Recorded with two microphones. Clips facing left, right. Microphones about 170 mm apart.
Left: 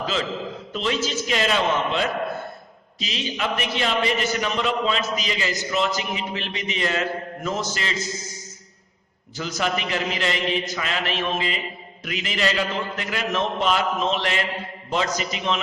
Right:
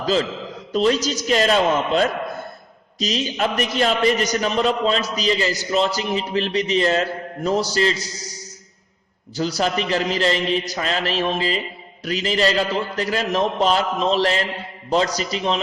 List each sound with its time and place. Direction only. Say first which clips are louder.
0.0 s a man's voice: right 5 dB; 35° right (ahead or behind)